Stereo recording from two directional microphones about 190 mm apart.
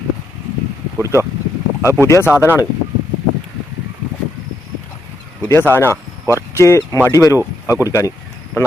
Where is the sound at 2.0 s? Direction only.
15° left (ahead or behind).